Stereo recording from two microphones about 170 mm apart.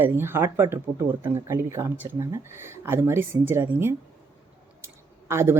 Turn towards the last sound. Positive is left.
turn(degrees=-15)  # may be behind; listen again after turning